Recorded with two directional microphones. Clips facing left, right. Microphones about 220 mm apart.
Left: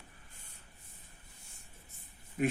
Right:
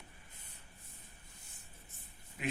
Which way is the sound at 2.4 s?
50° left (ahead or behind).